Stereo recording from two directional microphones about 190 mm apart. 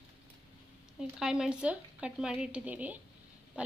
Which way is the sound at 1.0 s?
5° right (ahead or behind).